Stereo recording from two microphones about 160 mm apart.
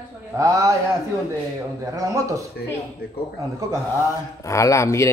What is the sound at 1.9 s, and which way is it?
Speech, 20° right (ahead or behind).